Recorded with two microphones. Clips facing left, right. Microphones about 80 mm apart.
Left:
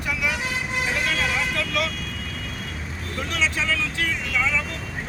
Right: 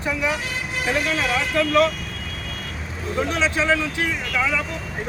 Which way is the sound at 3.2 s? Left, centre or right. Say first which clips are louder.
Right 4 dB; right.